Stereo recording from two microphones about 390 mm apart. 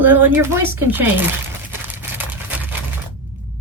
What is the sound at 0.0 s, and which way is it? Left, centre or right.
Speech, centre.